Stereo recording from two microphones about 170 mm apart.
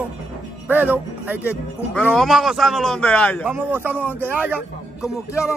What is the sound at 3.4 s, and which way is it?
A man's voice, 10° right (ahead or behind).